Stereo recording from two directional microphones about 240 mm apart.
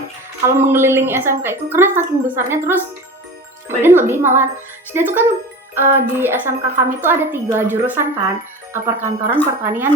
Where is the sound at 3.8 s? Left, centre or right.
Centre.